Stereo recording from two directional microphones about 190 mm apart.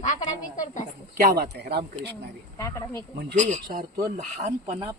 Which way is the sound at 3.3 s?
40° right (ahead or behind).